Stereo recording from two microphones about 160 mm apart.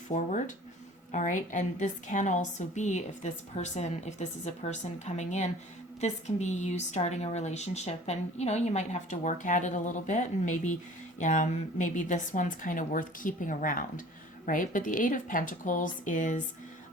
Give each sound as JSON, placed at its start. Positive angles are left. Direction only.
{"t": 0.1, "sound": "a woman's voice", "side_deg": 50}